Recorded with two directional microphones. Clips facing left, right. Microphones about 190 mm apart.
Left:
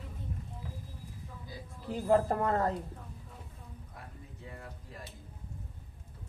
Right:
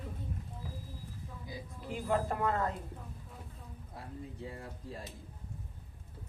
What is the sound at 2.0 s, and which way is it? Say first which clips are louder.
Speech: left 5 dB; 35° left (ahead or behind).